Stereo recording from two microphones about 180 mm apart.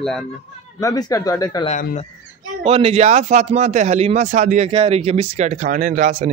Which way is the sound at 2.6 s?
30° right (ahead or behind).